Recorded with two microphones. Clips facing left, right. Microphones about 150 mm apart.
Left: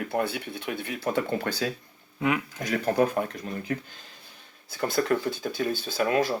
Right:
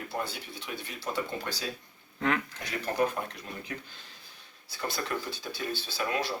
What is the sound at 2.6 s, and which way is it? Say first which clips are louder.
Speech: left 6 dB; 50° left (ahead or behind).